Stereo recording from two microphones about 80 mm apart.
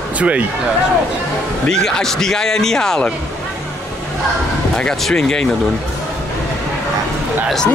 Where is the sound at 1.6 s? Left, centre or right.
Centre.